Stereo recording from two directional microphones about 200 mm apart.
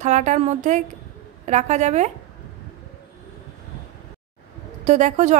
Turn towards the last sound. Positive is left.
turn(degrees=-35)  # may be behind; listen again after turning